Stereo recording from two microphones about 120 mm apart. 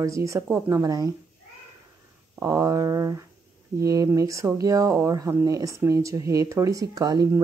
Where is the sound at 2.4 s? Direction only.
25° right (ahead or behind).